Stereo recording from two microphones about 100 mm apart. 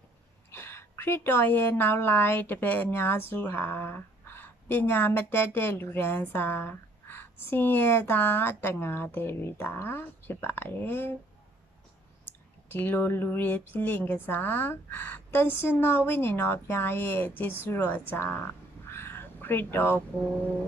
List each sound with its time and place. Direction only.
0.5 s a woman's voice: 25° left (ahead or behind)
12.3 s a woman's voice: 20° left (ahead or behind)
18.9 s a sound: 25° left (ahead or behind)